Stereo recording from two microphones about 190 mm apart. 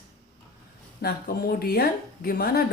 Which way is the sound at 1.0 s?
55° left (ahead or behind).